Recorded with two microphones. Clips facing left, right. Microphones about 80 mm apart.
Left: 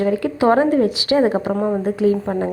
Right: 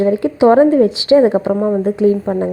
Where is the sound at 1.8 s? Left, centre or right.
Right.